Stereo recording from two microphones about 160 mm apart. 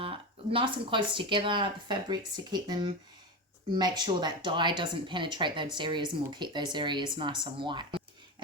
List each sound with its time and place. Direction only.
0.5 s speech: 30° right (ahead or behind)